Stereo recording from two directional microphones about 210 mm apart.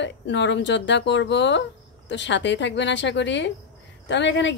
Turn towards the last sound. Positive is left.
turn(degrees=60)  # may be behind; listen again after turning